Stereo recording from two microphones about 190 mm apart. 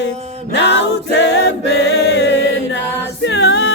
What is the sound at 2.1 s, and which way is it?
Chant, 70° left (ahead or behind).